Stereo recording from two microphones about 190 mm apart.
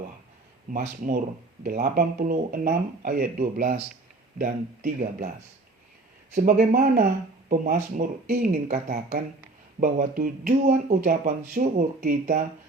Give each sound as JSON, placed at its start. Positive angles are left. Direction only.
{"t": 0.7, "sound": "speech", "side_deg": -45}
{"t": 6.3, "sound": "speech", "side_deg": -45}